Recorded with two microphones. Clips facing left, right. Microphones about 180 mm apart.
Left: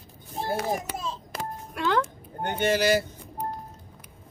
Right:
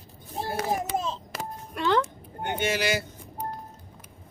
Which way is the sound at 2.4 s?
45° left (ahead or behind).